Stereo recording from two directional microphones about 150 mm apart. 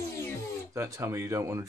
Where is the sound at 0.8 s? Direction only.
20° right (ahead or behind).